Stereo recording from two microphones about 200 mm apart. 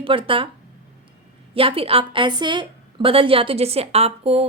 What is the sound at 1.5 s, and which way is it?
A woman's voice, 30° right (ahead or behind).